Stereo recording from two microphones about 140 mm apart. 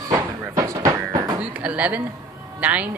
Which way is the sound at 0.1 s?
25° right (ahead or behind).